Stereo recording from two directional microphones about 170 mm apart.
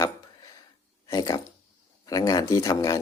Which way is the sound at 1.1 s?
25° left (ahead or behind).